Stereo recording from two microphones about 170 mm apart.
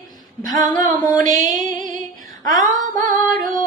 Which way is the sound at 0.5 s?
20° left (ahead or behind).